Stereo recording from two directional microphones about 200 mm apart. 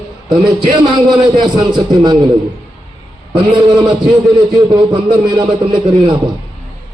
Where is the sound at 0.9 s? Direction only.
20° right (ahead or behind).